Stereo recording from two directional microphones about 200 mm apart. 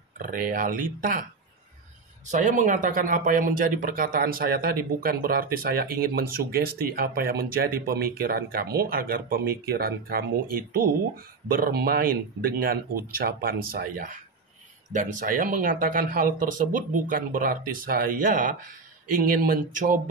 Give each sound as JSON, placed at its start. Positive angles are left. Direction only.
{"t": 0.2, "sound": "speech", "side_deg": -40}
{"t": 2.3, "sound": "speech", "side_deg": -40}